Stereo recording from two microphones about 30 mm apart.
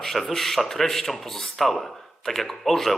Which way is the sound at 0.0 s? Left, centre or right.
Centre.